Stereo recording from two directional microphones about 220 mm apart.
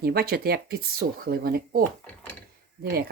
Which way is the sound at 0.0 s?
45° right (ahead or behind).